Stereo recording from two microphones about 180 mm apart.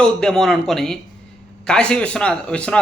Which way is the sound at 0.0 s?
5° left (ahead or behind).